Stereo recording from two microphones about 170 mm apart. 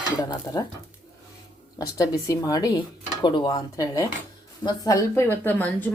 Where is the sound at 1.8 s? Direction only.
20° left (ahead or behind).